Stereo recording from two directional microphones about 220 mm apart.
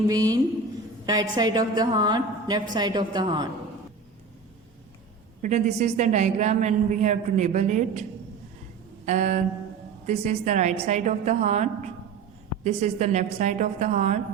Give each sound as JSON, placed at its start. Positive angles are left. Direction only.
{"t": 0.1, "sound": "a woman's voice", "side_deg": -15}
{"t": 5.4, "sound": "a man's voice", "side_deg": -30}
{"t": 9.0, "sound": "a man's voice", "side_deg": -35}